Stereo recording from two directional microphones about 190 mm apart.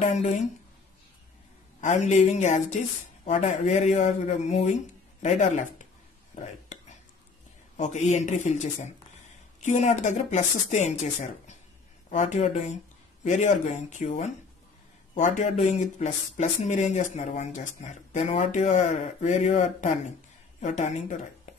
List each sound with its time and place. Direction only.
0.0 s speech: 40° left (ahead or behind)
1.8 s speech: 40° left (ahead or behind)
6.3 s whispering: 40° left (ahead or behind)
7.7 s speech: 40° left (ahead or behind)